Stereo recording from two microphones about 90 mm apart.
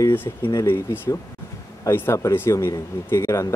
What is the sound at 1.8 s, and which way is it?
Speech, 30° left (ahead or behind).